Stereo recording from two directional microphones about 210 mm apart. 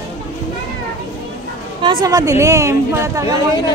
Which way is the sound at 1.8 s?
20° right (ahead or behind).